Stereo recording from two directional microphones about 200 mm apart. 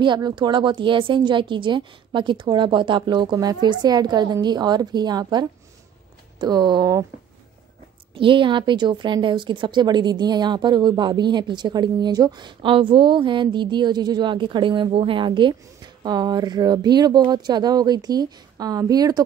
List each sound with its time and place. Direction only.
0.0 s speech: 25° right (ahead or behind)
8.1 s speech: 25° right (ahead or behind)